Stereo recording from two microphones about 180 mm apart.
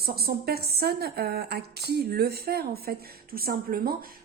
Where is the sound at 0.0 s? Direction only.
60° right (ahead or behind).